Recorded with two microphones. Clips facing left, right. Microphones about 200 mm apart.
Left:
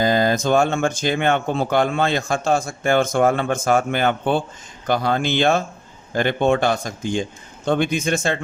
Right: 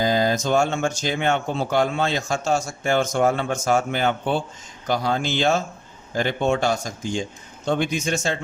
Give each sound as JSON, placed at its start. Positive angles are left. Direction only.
{"t": 0.0, "sound": "speech", "side_deg": 55}